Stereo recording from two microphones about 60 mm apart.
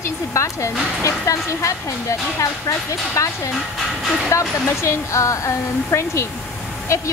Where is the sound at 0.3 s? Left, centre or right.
Left.